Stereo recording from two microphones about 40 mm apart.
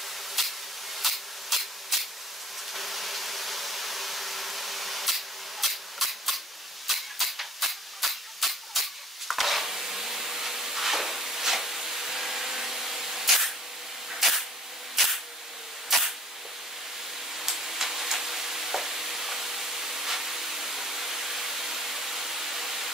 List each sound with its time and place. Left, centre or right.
0.4 s a sound: centre
6.9 s steam: centre
9.3 s wood: centre
14.1 s a sound: centre
15.9 s camera: centre
17.3 s stir: centre